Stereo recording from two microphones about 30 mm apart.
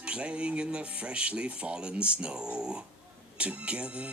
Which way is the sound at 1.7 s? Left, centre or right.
Right.